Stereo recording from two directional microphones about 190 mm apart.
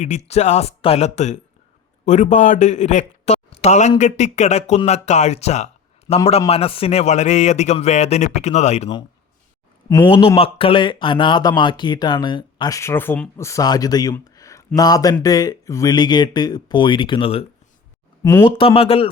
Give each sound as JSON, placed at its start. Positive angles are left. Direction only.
{"t": 0.3, "sound": "a man's voice", "side_deg": 35}
{"t": 10.1, "sound": "speech", "side_deg": 30}
{"t": 18.2, "sound": "speech", "side_deg": 15}
{"t": 18.4, "sound": "speech", "side_deg": 30}